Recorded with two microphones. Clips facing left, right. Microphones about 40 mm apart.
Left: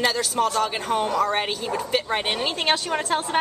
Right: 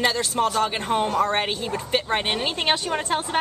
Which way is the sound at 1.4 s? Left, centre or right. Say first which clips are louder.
Left 1 dB; centre.